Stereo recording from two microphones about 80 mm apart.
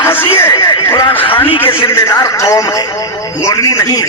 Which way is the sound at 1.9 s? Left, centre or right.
Left.